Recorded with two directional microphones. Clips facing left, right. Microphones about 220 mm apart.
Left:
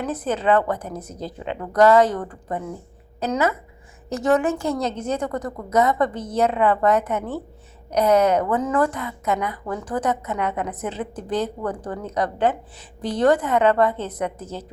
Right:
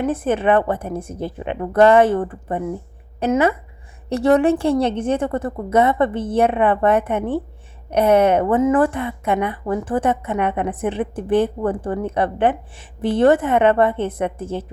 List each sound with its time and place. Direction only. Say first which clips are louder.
0.0 s a woman's voice: right 5 dB; 25° right (ahead or behind)